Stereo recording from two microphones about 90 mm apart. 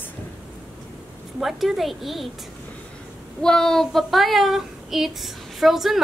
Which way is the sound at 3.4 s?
5° left (ahead or behind).